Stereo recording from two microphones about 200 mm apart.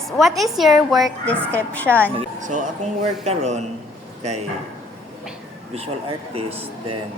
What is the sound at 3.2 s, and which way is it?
A man's voice, 35° right (ahead or behind).